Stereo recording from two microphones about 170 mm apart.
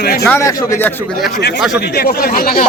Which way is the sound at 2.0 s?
65° left (ahead or behind).